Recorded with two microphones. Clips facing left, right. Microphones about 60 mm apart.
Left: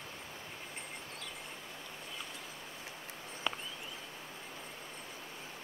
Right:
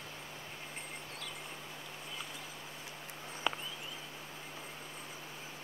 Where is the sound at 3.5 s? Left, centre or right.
Centre.